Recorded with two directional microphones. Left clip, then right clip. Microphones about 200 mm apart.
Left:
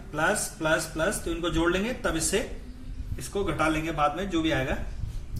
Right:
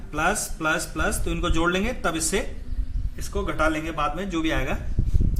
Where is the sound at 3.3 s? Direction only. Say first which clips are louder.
Right 2 dB; 15° right (ahead or behind).